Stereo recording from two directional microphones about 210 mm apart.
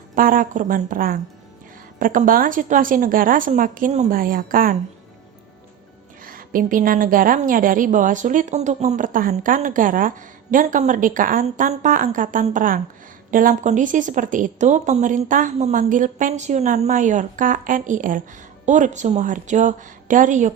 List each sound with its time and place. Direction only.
0.1 s a woman's voice: 40° right (ahead or behind)
6.2 s a woman's voice: 40° right (ahead or behind)